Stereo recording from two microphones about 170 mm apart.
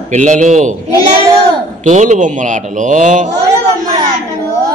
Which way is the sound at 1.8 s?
45° right (ahead or behind).